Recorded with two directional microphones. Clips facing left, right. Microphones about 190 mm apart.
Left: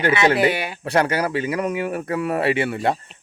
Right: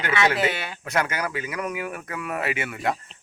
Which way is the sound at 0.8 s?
30° left (ahead or behind).